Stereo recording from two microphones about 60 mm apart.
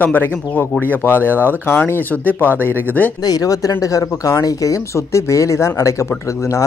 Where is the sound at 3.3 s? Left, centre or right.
Left.